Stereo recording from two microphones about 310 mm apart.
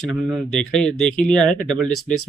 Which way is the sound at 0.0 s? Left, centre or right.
Centre.